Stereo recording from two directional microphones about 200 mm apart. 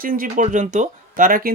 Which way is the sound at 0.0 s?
45° right (ahead or behind).